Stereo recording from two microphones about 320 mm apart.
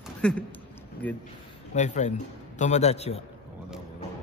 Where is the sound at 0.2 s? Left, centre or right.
Centre.